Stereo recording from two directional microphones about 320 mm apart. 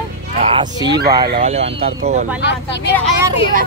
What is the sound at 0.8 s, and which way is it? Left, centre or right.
Speech, right.